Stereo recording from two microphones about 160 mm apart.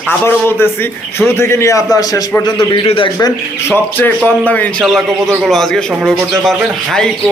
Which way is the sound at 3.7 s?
10° left (ahead or behind).